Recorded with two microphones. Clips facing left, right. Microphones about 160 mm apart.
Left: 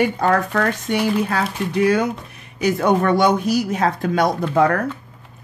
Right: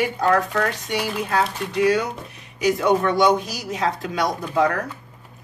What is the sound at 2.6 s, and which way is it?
Speech, 55° left (ahead or behind).